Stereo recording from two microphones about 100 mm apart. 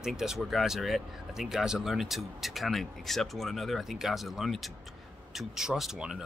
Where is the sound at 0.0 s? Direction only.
5° right (ahead or behind).